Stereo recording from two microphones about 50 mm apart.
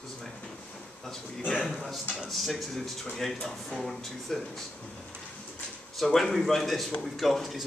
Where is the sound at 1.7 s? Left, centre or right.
Centre.